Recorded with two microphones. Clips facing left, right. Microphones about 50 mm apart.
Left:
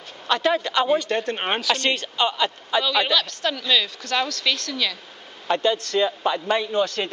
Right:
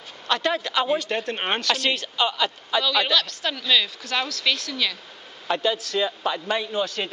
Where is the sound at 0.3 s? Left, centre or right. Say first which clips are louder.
Left 3 dB; centre.